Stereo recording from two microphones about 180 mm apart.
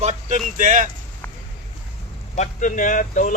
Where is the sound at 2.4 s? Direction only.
45° left (ahead or behind).